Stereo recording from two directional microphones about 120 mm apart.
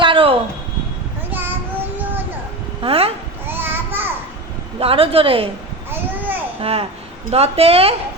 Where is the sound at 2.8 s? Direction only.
55° right (ahead or behind).